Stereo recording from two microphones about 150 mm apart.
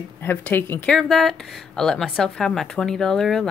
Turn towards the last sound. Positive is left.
turn(degrees=5)  # may be behind; listen again after turning